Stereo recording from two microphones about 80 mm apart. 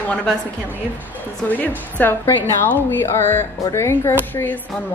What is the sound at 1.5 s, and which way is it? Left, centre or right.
A woman's voice, left.